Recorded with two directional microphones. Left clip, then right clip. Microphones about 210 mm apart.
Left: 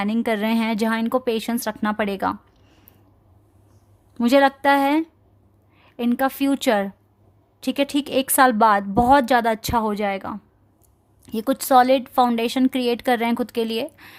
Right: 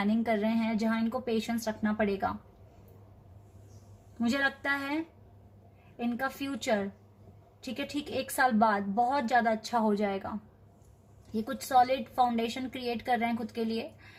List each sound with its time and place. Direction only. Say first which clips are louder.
0.0 s speech: left 7 dB; 45° left (ahead or behind)
4.2 s speech: left 14 dB; 55° left (ahead or behind)
9.8 s a woman's voice: left 7 dB; 40° left (ahead or behind)
11.3 s speech: left 12 dB; 55° left (ahead or behind)